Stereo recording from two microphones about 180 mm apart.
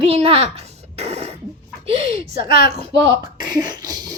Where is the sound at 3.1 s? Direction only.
25° right (ahead or behind).